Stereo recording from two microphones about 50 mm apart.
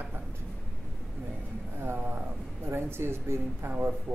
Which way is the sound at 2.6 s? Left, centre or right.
Right.